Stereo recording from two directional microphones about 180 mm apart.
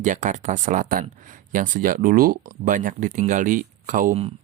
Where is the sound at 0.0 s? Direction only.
45° right (ahead or behind).